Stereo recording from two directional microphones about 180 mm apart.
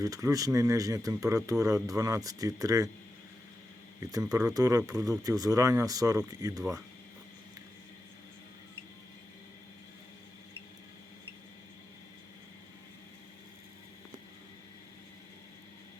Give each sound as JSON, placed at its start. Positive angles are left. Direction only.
{"t": 0.0, "sound": "speech", "side_deg": -20}
{"t": 4.0, "sound": "speech", "side_deg": -20}